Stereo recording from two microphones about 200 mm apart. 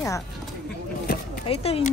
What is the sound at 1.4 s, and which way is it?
Speech, 30° left (ahead or behind).